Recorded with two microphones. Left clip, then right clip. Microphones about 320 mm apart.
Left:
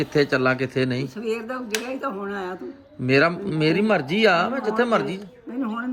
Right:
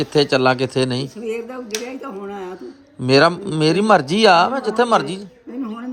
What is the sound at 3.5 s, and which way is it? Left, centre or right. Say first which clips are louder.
Speech: right 4 dB; right.